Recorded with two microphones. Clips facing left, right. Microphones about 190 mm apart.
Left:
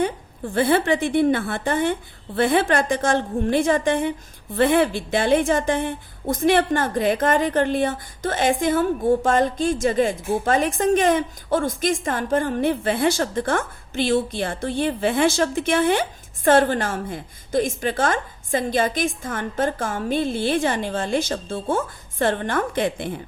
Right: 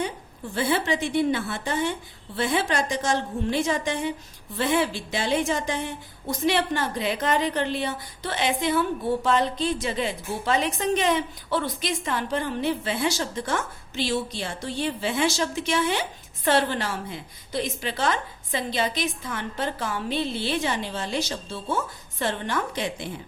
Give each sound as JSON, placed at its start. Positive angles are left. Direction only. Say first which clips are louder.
{"t": 0.0, "sound": "a woman's voice", "louder": "left 6 dB", "side_deg": 55}